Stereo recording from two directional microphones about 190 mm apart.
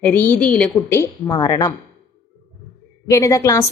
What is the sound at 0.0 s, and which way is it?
A woman's voice, 10° left (ahead or behind).